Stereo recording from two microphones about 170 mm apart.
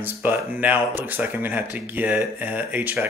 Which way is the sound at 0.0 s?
10° right (ahead or behind).